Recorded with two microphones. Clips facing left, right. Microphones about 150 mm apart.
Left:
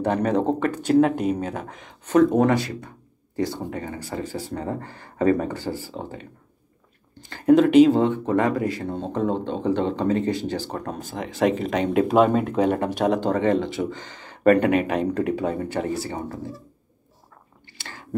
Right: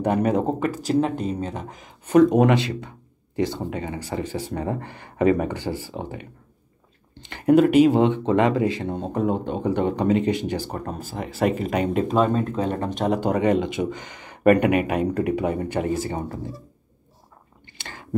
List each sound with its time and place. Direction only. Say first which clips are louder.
0.0 s speech: even; 10° right (ahead or behind)
8.0 s speech: right 2 dB; 20° right (ahead or behind); by 12.0 s 5° right (ahead or behind)
12.0 s speech: left 5 dB; 10° left (ahead or behind)
13.2 s speech: right 1 dB; 15° right (ahead or behind)